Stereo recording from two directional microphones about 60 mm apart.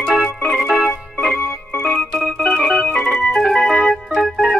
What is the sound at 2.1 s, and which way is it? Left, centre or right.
Organ, centre.